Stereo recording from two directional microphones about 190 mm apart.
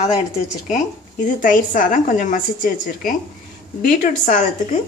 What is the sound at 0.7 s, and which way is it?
A woman's voice, 40° left (ahead or behind).